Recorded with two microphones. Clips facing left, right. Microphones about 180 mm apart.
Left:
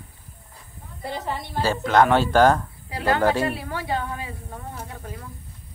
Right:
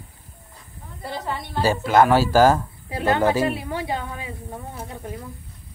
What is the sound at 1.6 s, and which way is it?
Speech, 10° right (ahead or behind).